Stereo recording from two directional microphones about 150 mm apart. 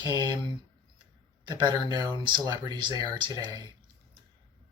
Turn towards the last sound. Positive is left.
turn(degrees=-30)  # may be behind; listen again after turning